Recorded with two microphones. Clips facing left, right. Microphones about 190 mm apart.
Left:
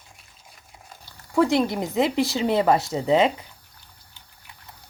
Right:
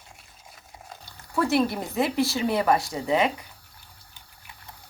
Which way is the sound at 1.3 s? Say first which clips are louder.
Left 3 dB; 15° left (ahead or behind).